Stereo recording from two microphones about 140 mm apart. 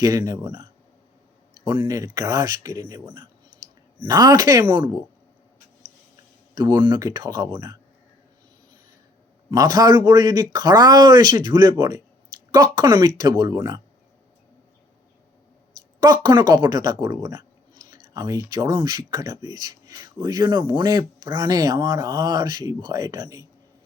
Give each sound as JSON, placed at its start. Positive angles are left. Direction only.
{"t": 0.0, "sound": "speech", "side_deg": -25}
{"t": 1.8, "sound": "speech", "side_deg": -25}
{"t": 4.0, "sound": "speech", "side_deg": -25}
{"t": 4.6, "sound": "speech", "side_deg": -35}
{"t": 6.5, "sound": "speech", "side_deg": -30}
{"t": 9.5, "sound": "speech", "side_deg": -25}
{"t": 16.2, "sound": "speech", "side_deg": -30}